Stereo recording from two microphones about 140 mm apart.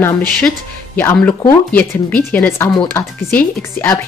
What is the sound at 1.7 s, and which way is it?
A woman's voice, 10° left (ahead or behind).